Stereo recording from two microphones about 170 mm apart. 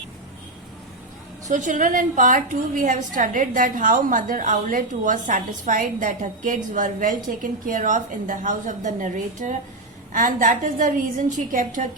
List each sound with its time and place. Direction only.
1.5 s a woman's voice: 45° right (ahead or behind)